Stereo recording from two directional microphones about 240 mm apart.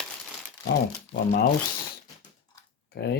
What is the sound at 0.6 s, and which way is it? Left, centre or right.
Speech, left.